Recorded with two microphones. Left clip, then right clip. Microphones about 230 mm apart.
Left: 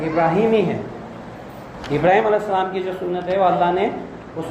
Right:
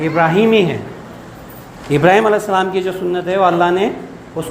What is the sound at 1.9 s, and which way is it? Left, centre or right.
A man's voice, right.